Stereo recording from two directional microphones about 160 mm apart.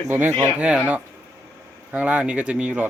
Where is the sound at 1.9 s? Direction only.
10° right (ahead or behind).